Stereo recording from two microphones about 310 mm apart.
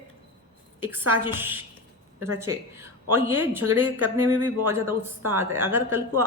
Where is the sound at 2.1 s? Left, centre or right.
Right.